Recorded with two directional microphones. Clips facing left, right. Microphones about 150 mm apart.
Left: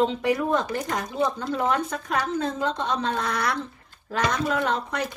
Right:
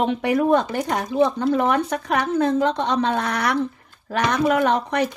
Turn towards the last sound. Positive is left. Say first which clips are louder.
# right 6 dB
turn(degrees=-70)  # may be behind; listen again after turning